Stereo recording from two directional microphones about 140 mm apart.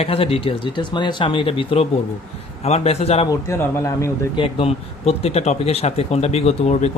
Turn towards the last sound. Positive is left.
turn(degrees=50)  # may be behind; listen again after turning